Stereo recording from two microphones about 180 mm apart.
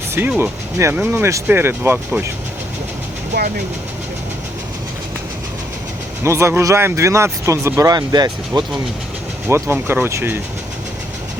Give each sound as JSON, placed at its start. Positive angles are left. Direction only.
{"t": 0.1, "sound": "speech", "side_deg": -10}
{"t": 6.2, "sound": "speech", "side_deg": -15}